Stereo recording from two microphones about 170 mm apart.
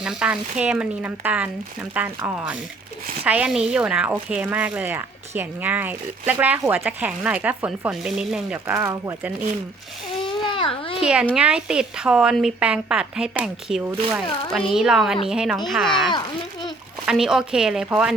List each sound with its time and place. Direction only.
0.0 s a woman's voice: 5° right (ahead or behind)
8.5 s a woman's voice: 15° right (ahead or behind)
10.2 s baby cry: 30° left (ahead or behind)
11.0 s speech: 5° right (ahead or behind)
16.0 s speech: 25° left (ahead or behind)
17.1 s speech: 5° right (ahead or behind)